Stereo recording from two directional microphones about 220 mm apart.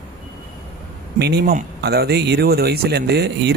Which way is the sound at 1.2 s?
45° right (ahead or behind).